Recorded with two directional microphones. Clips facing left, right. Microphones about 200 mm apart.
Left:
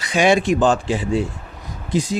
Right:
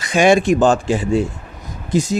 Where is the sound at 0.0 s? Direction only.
45° right (ahead or behind).